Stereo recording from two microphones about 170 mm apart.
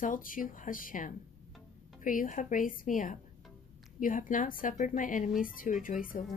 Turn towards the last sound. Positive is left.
turn(degrees=50)  # may be behind; listen again after turning